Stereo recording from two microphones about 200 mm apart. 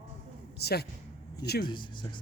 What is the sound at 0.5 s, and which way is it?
Speech, 55° left (ahead or behind).